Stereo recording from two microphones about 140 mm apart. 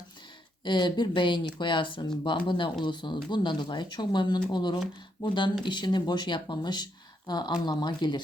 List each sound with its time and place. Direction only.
0.6 s speech: 35° left (ahead or behind)